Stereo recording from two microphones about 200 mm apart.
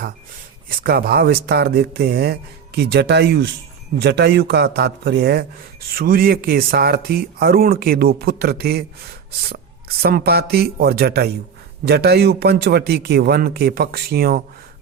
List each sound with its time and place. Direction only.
0.7 s a man's voice: 50° right (ahead or behind)
10.0 s speech: 50° right (ahead or behind)